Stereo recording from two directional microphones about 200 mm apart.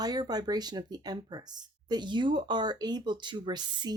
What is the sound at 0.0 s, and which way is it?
Speech, 20° right (ahead or behind).